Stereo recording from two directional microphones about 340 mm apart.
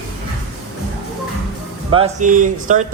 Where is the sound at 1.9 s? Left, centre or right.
Centre.